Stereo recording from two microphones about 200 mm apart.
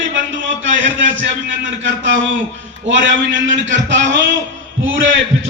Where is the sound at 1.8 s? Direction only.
65° right (ahead or behind).